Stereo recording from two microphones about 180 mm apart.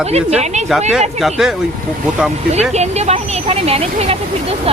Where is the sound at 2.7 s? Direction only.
35° right (ahead or behind).